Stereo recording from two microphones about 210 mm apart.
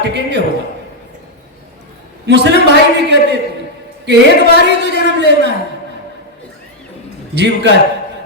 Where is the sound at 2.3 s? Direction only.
55° right (ahead or behind).